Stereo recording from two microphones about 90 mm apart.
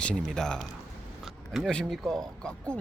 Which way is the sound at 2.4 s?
10° left (ahead or behind).